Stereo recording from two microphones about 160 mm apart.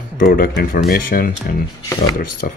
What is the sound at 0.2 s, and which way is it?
Speech, 65° left (ahead or behind).